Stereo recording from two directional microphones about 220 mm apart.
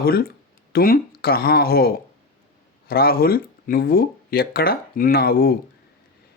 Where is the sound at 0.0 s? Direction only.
45° left (ahead or behind).